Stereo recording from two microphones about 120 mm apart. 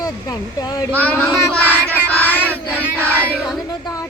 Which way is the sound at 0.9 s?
15° left (ahead or behind).